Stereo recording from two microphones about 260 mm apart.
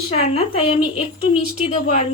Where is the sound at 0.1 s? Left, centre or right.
Left.